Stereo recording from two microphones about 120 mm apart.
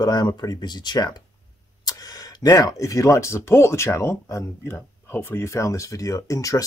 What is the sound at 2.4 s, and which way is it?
Speech, 30° left (ahead or behind).